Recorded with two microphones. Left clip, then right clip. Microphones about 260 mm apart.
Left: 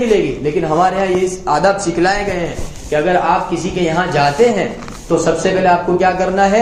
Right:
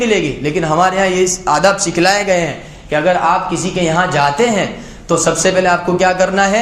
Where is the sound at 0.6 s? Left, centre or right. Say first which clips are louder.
Right 2 dB; right.